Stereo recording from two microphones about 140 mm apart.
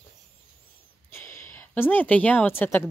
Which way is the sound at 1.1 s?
20° left (ahead or behind).